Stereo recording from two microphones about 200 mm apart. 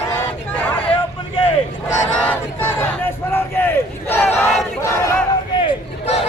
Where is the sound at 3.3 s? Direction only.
10° left (ahead or behind).